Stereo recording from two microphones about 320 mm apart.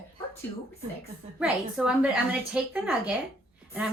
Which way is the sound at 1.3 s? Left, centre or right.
Centre.